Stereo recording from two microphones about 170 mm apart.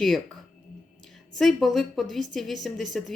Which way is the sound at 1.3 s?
Centre (ahead or behind).